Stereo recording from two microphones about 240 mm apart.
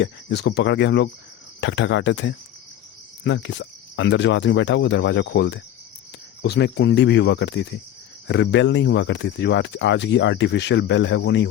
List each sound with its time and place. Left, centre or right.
0.0 s speech: left